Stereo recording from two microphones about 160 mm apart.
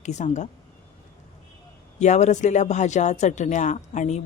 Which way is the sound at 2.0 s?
45° left (ahead or behind).